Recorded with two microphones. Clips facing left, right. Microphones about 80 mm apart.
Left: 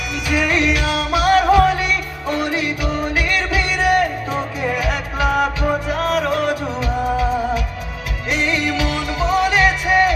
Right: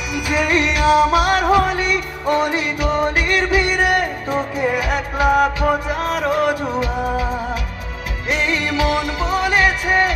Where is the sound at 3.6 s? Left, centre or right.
Right.